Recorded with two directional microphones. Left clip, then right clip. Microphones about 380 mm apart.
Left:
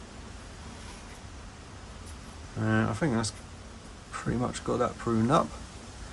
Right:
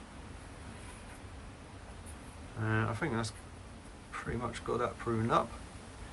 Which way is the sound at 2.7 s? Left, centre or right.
Centre.